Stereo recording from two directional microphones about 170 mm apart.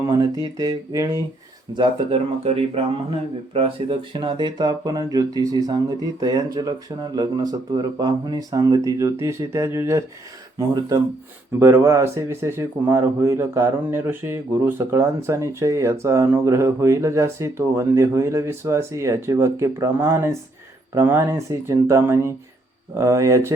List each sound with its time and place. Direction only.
0.0 s speech: 20° right (ahead or behind)